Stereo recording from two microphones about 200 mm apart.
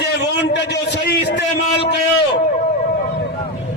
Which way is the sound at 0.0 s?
60° left (ahead or behind).